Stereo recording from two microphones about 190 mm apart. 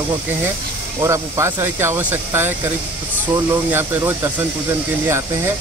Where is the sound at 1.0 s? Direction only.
15° right (ahead or behind).